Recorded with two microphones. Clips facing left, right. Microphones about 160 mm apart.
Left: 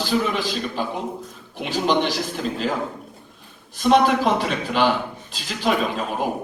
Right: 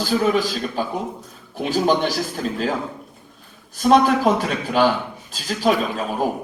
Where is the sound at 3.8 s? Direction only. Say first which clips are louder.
Right 1 dB; 45° right (ahead or behind).